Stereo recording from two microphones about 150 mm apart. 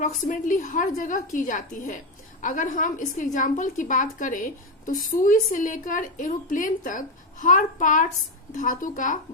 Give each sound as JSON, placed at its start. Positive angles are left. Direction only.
{"t": 0.0, "sound": "a woman's voice", "side_deg": 60}